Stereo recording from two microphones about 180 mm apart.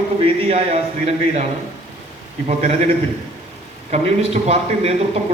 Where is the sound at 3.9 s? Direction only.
35° right (ahead or behind).